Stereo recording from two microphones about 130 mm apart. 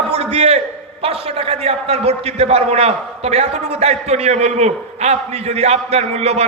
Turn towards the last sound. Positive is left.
turn(degrees=-55)  # may be behind; listen again after turning